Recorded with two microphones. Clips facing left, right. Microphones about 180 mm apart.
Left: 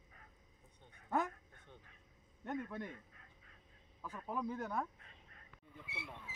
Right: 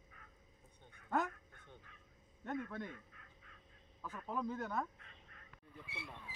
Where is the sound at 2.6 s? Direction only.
10° left (ahead or behind).